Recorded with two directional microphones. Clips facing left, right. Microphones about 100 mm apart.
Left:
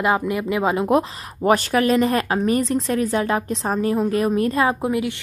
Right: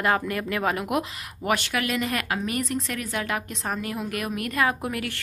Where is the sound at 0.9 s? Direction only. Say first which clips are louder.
Left 8 dB; 35° left (ahead or behind).